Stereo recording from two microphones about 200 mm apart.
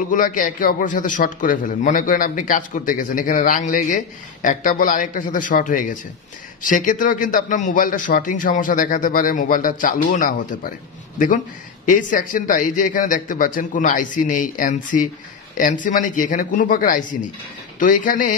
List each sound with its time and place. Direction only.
0.1 s a man's voice: 40° left (ahead or behind)
11.8 s a man's voice: 40° left (ahead or behind)